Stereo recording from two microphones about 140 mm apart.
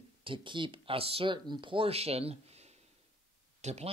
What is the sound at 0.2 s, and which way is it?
Speech, 35° right (ahead or behind).